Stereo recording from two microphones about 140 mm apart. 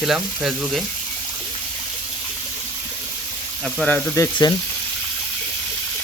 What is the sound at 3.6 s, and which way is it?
Speech, 5° left (ahead or behind).